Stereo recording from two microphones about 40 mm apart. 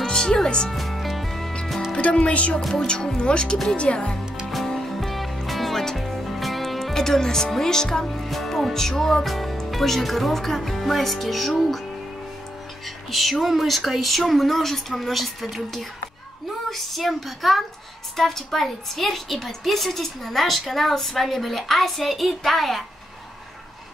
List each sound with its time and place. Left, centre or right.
0.0 s music: centre
0.7 s music: centre
2.0 s speech: left
4.5 s music: centre
6.9 s a woman's voice: centre
13.1 s a woman's voice: centre